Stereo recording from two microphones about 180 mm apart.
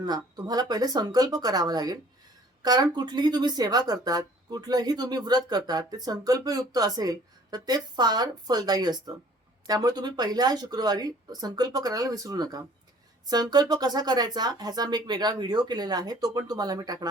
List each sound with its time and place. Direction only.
0.0 s speech: 20° right (ahead or behind)